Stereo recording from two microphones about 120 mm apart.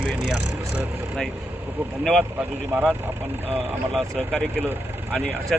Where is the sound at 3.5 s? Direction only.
15° right (ahead or behind).